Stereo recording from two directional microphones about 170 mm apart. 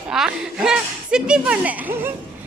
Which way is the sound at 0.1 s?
5° right (ahead or behind).